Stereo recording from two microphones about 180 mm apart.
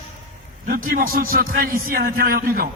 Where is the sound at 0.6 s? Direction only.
50° right (ahead or behind).